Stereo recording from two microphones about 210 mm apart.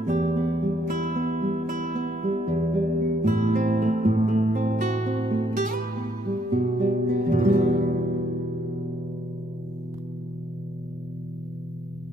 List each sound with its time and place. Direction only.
0.0 s music: 35° right (ahead or behind)